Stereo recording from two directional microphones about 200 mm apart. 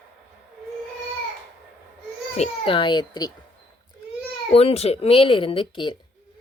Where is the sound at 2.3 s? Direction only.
30° left (ahead or behind).